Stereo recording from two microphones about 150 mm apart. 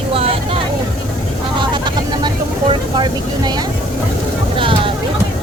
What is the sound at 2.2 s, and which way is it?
Speech, 30° right (ahead or behind).